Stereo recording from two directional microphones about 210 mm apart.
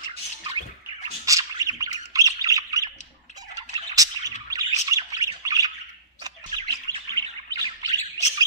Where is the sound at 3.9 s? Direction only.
15° right (ahead or behind).